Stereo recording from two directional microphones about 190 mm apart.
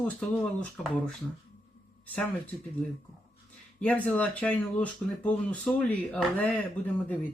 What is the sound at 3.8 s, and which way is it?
Speech, 5° left (ahead or behind).